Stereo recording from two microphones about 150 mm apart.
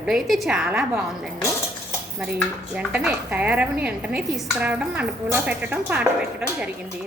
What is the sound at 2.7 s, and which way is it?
A woman's voice, 10° right (ahead or behind).